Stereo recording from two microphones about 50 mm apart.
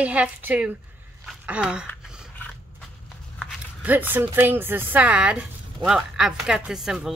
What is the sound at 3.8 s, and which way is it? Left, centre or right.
Speech, right.